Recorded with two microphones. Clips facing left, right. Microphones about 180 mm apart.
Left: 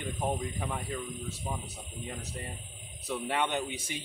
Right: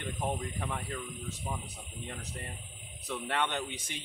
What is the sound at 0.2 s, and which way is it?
Speech, 10° left (ahead or behind).